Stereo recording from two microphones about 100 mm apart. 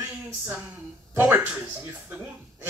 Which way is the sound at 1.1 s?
15° right (ahead or behind).